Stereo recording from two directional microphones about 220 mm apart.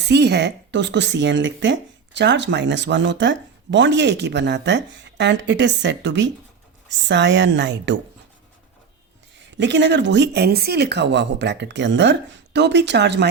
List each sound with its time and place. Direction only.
0.0 s speech: 50° right (ahead or behind)
9.6 s speech: 55° right (ahead or behind)